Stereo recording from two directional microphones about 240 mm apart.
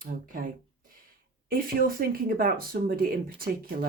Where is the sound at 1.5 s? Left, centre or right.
Right.